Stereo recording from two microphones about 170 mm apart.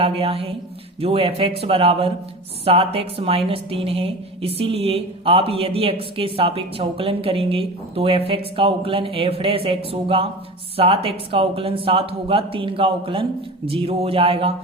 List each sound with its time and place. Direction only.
0.0 s a woman's voice: 35° right (ahead or behind)